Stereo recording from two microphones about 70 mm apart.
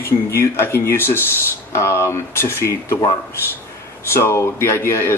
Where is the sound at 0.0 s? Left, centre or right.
Left.